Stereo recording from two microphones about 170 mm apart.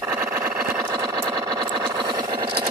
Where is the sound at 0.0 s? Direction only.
15° right (ahead or behind).